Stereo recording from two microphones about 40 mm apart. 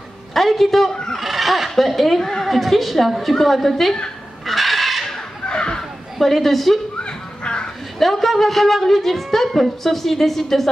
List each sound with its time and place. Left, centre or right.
0.3 s a woman's voice: centre
4.5 s chicken: centre
5.5 s a sound: left
6.1 s a woman's voice: centre
7.0 s music: left
8.0 s a woman's voice: centre